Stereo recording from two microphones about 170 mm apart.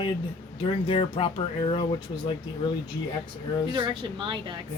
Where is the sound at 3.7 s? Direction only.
25° right (ahead or behind).